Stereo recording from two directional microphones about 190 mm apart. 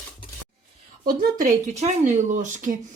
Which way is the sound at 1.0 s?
45° right (ahead or behind).